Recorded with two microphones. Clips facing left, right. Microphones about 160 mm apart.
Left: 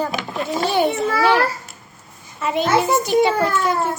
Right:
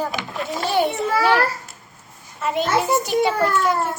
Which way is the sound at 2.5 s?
5° right (ahead or behind).